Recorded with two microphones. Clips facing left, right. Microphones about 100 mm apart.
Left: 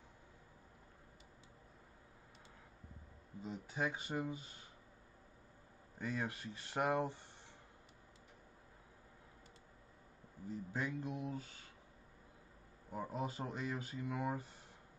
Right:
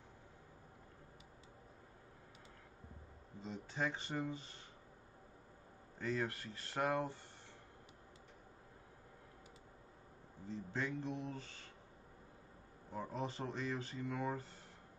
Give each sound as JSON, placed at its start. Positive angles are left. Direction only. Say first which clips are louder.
{"t": 3.4, "sound": "speech", "louder": "even", "side_deg": 10}
{"t": 5.9, "sound": "speech", "louder": "right 2 dB", "side_deg": 15}
{"t": 10.5, "sound": "speech", "louder": "even", "side_deg": 10}
{"t": 12.9, "sound": "speech", "louder": "left 1 dB", "side_deg": 10}